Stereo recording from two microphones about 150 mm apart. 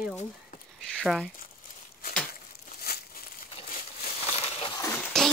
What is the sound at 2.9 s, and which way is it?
Crumpling, 90° left.